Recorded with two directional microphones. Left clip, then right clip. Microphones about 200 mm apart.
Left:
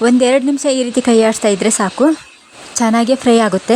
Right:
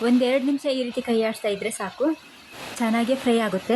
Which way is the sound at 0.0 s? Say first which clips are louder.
Left 9 dB; 35° left (ahead or behind).